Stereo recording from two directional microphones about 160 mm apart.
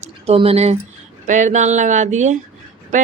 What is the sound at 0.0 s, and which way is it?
Speech, 40° right (ahead or behind).